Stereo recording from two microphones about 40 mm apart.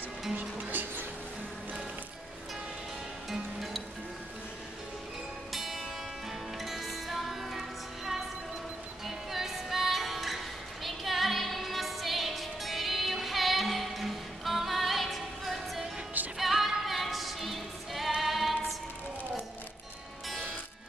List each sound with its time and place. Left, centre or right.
0.4 s music: right
5.5 s music: centre